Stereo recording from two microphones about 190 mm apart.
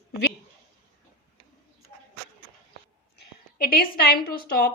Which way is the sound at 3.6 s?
50° left (ahead or behind).